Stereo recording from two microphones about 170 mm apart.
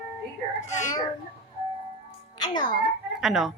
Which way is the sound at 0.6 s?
45° left (ahead or behind).